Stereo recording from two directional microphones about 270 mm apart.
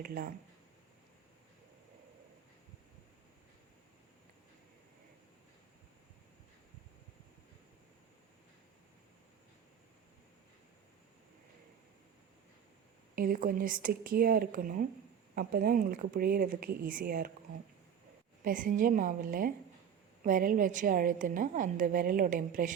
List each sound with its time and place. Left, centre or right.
0.0 s speech: right
13.1 s speech: right
18.4 s a woman's voice: right